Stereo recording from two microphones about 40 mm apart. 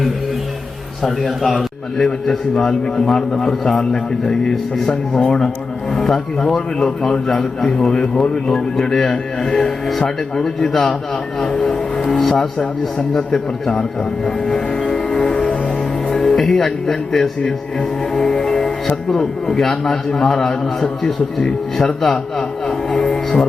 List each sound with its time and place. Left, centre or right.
1.0 s a man's voice: centre
14.3 s music: centre
16.0 s speech: centre
21.0 s a sound: centre